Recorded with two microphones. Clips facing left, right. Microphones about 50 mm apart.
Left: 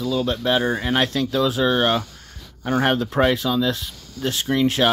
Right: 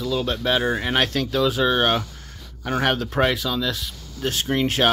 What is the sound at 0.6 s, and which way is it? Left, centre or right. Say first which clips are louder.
Speech: left 1 dB; right.